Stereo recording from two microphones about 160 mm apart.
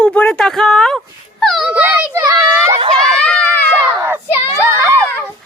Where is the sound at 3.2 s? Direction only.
5° left (ahead or behind).